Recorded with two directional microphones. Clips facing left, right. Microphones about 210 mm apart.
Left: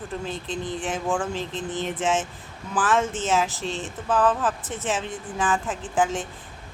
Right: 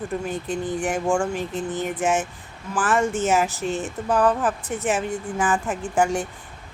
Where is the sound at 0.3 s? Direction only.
15° right (ahead or behind).